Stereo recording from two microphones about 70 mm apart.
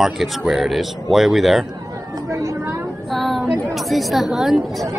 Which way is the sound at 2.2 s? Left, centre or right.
Right.